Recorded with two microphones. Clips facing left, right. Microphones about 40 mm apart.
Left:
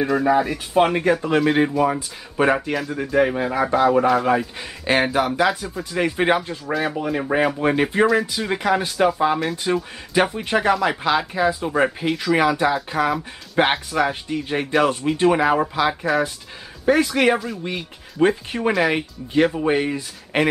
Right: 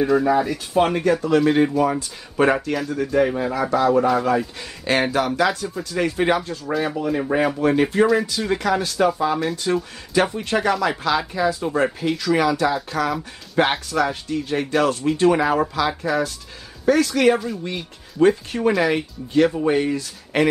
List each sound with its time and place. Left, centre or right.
0.2 s speech: centre
1.4 s speech: centre
3.1 s speech: centre
4.4 s speech: centre
6.6 s speech: centre
7.0 s speech: centre